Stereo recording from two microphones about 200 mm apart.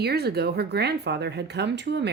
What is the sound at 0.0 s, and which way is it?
Speech, 50° right (ahead or behind).